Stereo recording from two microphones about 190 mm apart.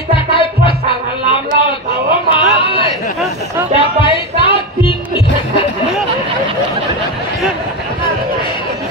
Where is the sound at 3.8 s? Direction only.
25° left (ahead or behind).